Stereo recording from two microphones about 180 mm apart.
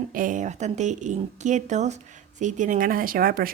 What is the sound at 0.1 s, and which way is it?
A woman's voice, 50° right (ahead or behind).